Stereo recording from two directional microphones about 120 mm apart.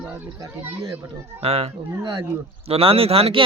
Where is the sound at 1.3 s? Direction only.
55° right (ahead or behind).